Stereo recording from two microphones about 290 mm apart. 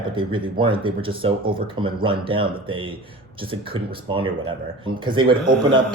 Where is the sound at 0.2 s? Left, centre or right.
Centre.